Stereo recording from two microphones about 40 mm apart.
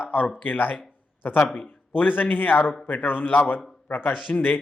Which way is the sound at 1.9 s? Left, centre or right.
Left.